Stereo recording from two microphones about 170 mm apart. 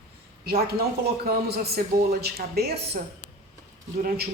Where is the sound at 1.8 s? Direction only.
60° right (ahead or behind).